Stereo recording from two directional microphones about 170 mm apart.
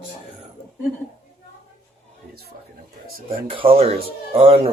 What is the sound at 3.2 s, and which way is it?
Speech, 30° right (ahead or behind).